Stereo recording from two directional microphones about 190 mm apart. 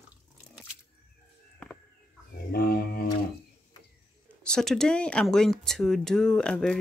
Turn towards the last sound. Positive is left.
turn(degrees=5)  # may be behind; listen again after turning